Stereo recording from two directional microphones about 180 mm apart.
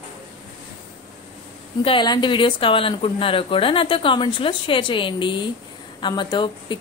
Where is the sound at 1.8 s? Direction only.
25° left (ahead or behind).